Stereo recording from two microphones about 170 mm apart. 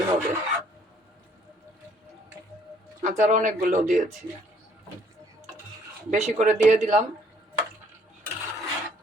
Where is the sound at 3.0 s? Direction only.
45° right (ahead or behind).